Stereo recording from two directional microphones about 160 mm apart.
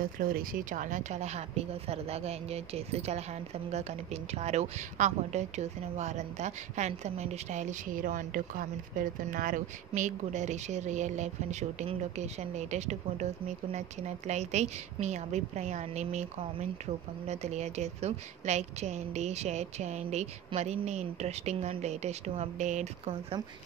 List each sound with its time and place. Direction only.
0.0 s speech: 65° right (ahead or behind); by 23.1 s 45° right (ahead or behind)